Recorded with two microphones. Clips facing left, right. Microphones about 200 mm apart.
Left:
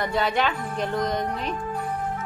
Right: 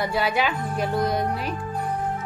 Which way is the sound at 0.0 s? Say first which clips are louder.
Even; 5° right (ahead or behind).